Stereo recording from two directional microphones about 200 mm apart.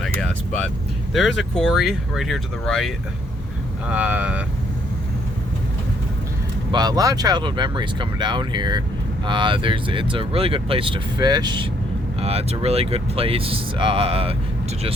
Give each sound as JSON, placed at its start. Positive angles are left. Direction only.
{"t": 0.0, "sound": "vehicle", "side_deg": 5}
{"t": 1.1, "sound": "speech", "side_deg": 0}
{"t": 6.7, "sound": "speech", "side_deg": -20}